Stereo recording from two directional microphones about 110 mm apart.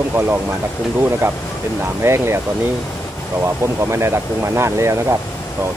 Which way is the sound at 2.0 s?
25° right (ahead or behind).